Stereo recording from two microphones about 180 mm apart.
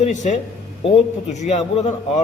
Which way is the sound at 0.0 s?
40° left (ahead or behind).